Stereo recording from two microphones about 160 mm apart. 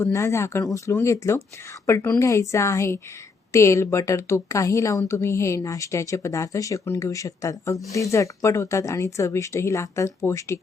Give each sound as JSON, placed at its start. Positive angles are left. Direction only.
{"t": 0.0, "sound": "a woman's voice", "side_deg": 15}